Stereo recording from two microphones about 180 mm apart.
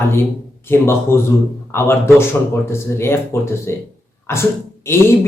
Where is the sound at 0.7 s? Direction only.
15° left (ahead or behind).